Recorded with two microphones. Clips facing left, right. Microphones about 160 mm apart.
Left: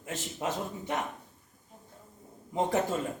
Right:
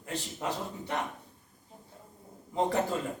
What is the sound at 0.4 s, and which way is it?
Speech, 15° left (ahead or behind).